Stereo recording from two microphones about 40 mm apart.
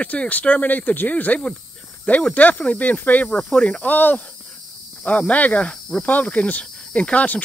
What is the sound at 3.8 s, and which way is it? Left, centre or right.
Cricket, left.